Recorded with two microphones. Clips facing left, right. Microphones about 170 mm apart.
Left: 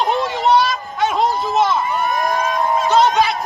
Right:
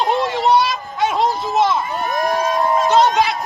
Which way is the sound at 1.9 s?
45° right (ahead or behind).